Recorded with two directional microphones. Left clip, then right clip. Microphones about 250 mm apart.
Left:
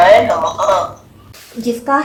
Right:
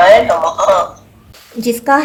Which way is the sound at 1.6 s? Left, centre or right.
Right.